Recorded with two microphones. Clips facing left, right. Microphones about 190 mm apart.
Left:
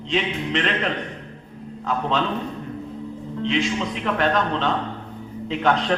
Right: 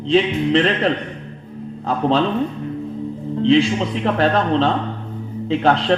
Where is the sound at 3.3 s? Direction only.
30° right (ahead or behind).